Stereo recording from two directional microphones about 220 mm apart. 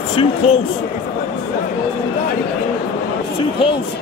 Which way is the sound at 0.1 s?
25° left (ahead or behind).